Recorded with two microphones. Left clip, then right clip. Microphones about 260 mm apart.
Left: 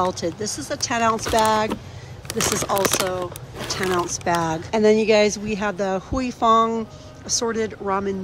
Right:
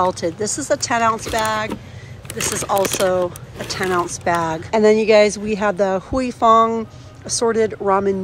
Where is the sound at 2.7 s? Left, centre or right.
Centre.